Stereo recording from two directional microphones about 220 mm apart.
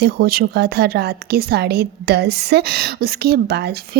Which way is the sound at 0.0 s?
45° right (ahead or behind).